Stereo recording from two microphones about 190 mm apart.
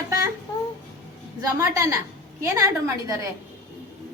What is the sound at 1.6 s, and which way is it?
A woman's voice, 15° right (ahead or behind).